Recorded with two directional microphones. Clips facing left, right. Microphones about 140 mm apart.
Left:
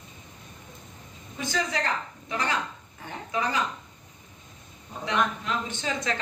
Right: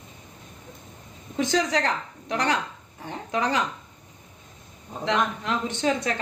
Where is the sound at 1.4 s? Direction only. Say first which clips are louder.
Right 6 dB; 80° right.